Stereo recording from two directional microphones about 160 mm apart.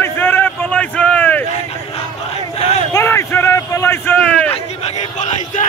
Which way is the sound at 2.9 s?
15° left (ahead or behind).